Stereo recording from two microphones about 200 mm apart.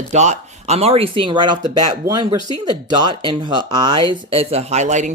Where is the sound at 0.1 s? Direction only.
35° right (ahead or behind).